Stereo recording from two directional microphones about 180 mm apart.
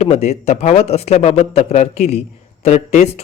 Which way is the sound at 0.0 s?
35° left (ahead or behind).